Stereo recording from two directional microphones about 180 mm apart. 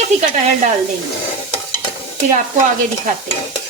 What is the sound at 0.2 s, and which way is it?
Speech, 40° right (ahead or behind).